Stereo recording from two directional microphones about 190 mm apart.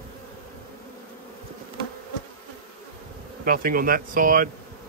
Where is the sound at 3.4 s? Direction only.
50° right (ahead or behind).